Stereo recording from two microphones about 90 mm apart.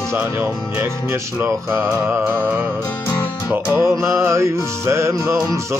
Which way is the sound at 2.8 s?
20° left (ahead or behind).